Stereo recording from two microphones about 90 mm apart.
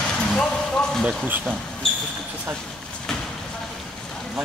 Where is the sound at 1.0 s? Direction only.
20° right (ahead or behind).